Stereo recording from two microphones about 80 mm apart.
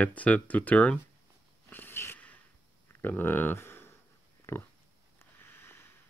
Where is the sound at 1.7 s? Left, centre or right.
Left.